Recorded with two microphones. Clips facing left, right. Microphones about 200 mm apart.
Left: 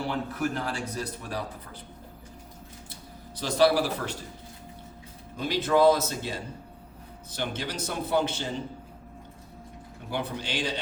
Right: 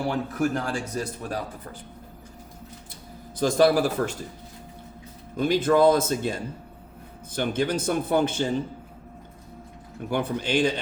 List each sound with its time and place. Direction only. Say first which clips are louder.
0.3 s a man's voice: right 4 dB; 45° right (ahead or behind)
3.3 s a man's voice: right 3 dB; 50° right (ahead or behind)
5.4 s a man's voice: right 3 dB; 50° right (ahead or behind)
10.1 s a man's voice: right 7 dB; 50° right (ahead or behind)